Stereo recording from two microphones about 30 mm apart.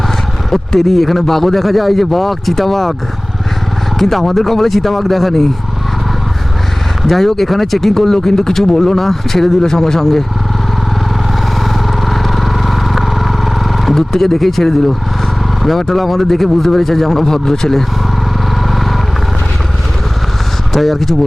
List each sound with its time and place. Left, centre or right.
0.5 s speech: centre
3.9 s speech: centre
7.1 s speech: centre
11.6 s vehicle: centre
13.9 s speech: centre
17.2 s speech: centre
20.7 s speech: centre